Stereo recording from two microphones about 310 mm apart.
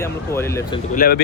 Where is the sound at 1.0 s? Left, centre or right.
Left.